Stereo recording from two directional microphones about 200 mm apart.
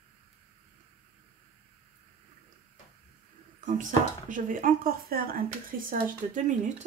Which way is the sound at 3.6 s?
40° right (ahead or behind).